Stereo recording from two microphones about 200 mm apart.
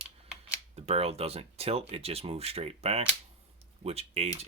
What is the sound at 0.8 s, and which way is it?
Speech, 30° right (ahead or behind).